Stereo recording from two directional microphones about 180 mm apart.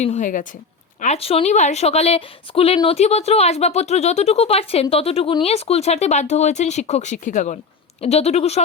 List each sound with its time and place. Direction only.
0.0 s a woman's voice: 40° left (ahead or behind)